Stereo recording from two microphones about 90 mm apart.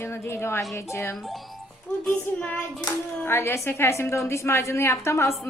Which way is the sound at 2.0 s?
15° left (ahead or behind).